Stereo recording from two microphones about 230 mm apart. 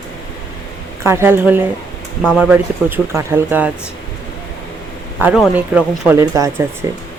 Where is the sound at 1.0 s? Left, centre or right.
Centre.